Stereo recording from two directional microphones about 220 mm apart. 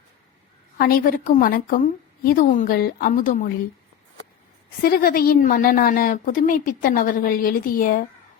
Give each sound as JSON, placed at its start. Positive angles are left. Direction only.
{"t": 0.8, "sound": "a woman's voice", "side_deg": 40}
{"t": 4.8, "sound": "a woman's voice", "side_deg": 45}